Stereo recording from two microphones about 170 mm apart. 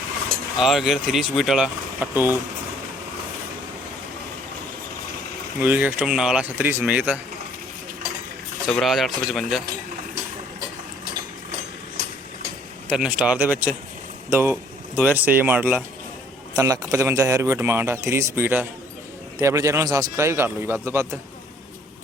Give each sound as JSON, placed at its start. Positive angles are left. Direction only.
{"t": 0.6, "sound": "speech", "side_deg": 0}
{"t": 5.5, "sound": "speech", "side_deg": -10}
{"t": 8.6, "sound": "speech", "side_deg": 0}
{"t": 12.9, "sound": "speech", "side_deg": -5}